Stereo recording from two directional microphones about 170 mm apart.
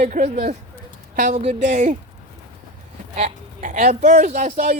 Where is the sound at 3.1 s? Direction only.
45° right (ahead or behind).